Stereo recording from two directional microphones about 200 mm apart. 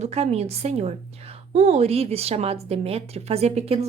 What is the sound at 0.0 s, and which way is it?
A woman's voice, 30° right (ahead or behind).